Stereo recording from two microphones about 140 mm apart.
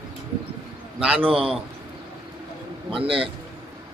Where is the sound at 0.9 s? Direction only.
5° right (ahead or behind).